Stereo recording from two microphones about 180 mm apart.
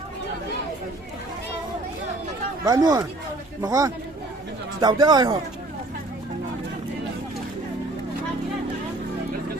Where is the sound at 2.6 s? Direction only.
20° right (ahead or behind).